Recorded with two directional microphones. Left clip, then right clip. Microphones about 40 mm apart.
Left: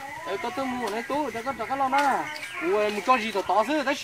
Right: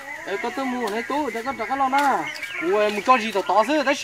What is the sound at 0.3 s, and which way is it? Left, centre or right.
Speech, centre.